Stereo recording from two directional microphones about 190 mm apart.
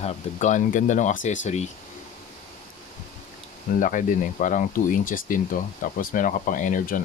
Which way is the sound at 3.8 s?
45° left (ahead or behind).